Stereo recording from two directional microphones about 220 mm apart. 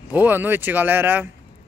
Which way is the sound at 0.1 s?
10° right (ahead or behind).